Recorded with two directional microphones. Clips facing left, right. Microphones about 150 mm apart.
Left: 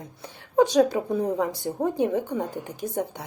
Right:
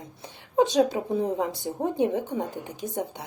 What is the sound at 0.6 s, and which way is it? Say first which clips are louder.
Speech: left 2 dB; 20° right (ahead or behind).